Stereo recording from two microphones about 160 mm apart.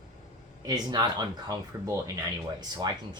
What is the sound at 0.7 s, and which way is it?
Speech, 25° right (ahead or behind).